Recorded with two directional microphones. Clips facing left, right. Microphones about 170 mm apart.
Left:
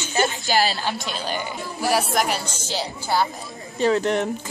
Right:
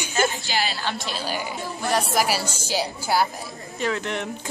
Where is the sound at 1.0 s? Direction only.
5° right (ahead or behind).